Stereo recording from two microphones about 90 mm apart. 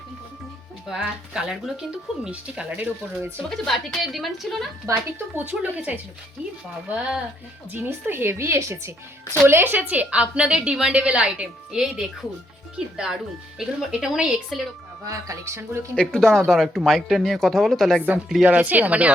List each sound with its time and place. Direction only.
0.9 s a woman's voice: 5° right (ahead or behind)
3.5 s speech: 5° left (ahead or behind)
4.9 s speech: 35° right (ahead or behind)
5.3 s a woman's voice: 20° right (ahead or behind)
7.7 s a woman's voice: 20° right (ahead or behind); by 14.7 s 5° right (ahead or behind)
15.0 s speech: 35° right (ahead or behind)
16.0 s speech: 5° left (ahead or behind)
18.4 s a woman's voice: 15° right (ahead or behind)